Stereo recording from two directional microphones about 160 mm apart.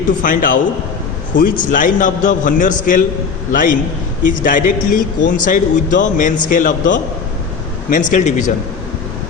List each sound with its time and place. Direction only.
0.2 s a man's voice: 60° left (ahead or behind)